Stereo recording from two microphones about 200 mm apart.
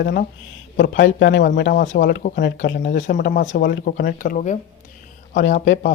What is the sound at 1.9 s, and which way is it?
Speech, 50° left (ahead or behind).